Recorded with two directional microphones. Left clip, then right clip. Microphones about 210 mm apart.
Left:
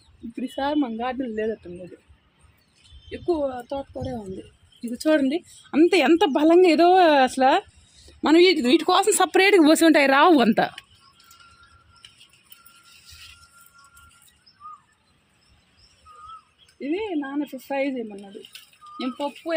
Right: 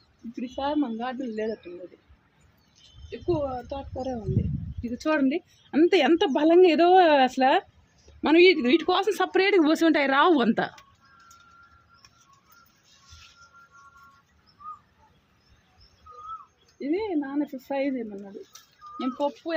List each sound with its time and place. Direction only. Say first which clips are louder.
0.3 s speech: left 3 dB; 40° left (ahead or behind)
3.1 s speech: left 3 dB; 45° left (ahead or behind)
4.9 s speech: left 4 dB; 35° left (ahead or behind)
5.7 s a woman's voice: left 3 dB; 25° left (ahead or behind)
16.8 s speech: left 1 dB; 20° left (ahead or behind)
18.9 s a woman's voice: right 1 dB; 20° left (ahead or behind)